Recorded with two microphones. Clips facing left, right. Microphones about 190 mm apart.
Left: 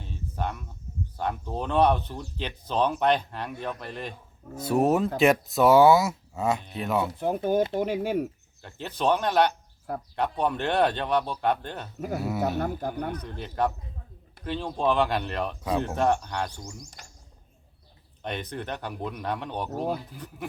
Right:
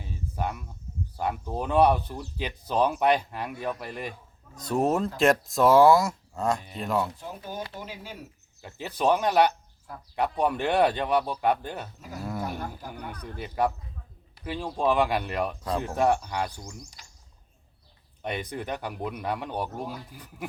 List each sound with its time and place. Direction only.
0.0 s a sound: 10° right (ahead or behind)
1.1 s speech: 10° right (ahead or behind)
4.6 s speech: 5° left (ahead or behind)
7.2 s speech: 55° left (ahead or behind)
8.6 s speech: 10° right (ahead or behind)
11.9 s speech: 55° left (ahead or behind)
12.4 s speech: 75° left (ahead or behind); by 13.1 s 55° left (ahead or behind)
13.2 s speech: 10° right (ahead or behind)
17.0 s bird: 50° left (ahead or behind)
18.2 s speech: 10° right (ahead or behind)